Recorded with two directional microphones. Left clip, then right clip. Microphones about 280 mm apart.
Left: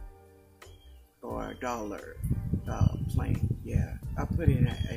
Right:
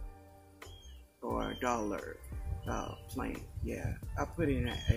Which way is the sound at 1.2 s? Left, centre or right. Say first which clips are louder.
Even; centre.